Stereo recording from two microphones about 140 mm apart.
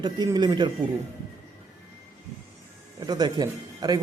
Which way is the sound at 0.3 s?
30° right (ahead or behind).